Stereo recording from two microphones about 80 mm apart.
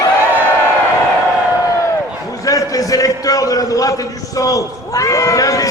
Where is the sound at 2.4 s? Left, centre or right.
Left.